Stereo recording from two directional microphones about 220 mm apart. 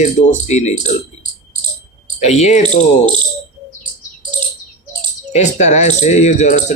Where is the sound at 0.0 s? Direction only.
30° left (ahead or behind).